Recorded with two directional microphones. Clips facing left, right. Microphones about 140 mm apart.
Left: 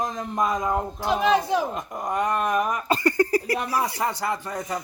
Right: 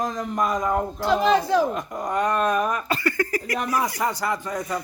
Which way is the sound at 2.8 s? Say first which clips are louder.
Left 3 dB; 35° left (ahead or behind).